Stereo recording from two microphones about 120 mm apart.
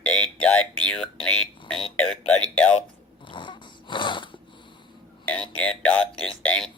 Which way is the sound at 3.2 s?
40° left (ahead or behind).